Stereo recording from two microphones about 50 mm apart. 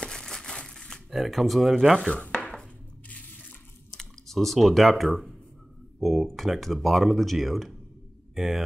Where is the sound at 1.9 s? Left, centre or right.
Centre.